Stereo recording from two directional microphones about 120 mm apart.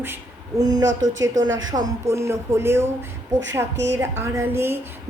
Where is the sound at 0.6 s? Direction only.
30° right (ahead or behind).